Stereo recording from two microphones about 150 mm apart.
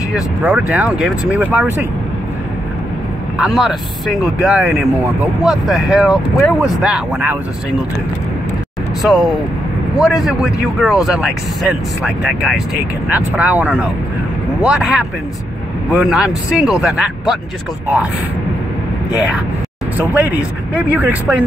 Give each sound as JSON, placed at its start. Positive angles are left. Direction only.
{"t": 0.1, "sound": "speech", "side_deg": -5}
{"t": 3.3, "sound": "speech", "side_deg": 0}
{"t": 9.0, "sound": "speech", "side_deg": 0}
{"t": 20.7, "sound": "speech", "side_deg": -10}